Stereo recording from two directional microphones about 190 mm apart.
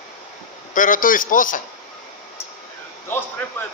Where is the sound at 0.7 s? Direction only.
45° left (ahead or behind).